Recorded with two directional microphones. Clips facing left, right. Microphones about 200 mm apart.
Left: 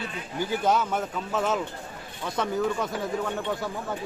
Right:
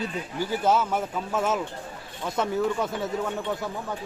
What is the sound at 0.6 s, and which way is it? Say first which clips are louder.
Speech: right 2 dB; 5° right (ahead or behind).